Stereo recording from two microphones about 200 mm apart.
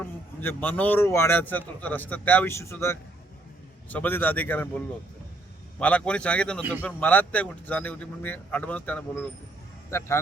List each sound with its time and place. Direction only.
0.0 s a man's voice: 10° left (ahead or behind)
5.8 s a man's voice: 5° left (ahead or behind)